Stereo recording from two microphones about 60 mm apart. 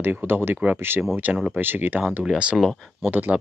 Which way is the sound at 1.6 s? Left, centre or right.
Right.